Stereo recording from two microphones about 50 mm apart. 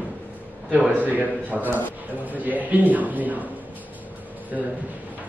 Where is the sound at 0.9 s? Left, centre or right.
Right.